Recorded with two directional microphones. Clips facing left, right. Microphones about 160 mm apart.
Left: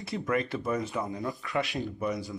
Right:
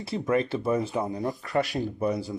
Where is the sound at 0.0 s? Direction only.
30° right (ahead or behind).